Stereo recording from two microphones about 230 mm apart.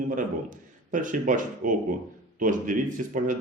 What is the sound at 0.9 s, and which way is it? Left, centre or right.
A man's voice, right.